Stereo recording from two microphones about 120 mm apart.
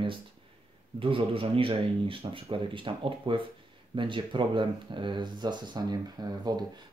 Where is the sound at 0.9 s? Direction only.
50° right (ahead or behind).